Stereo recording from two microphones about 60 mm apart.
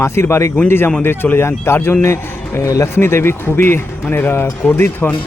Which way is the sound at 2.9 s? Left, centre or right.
Left.